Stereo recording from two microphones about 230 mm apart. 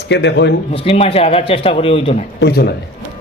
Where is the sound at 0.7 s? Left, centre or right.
Left.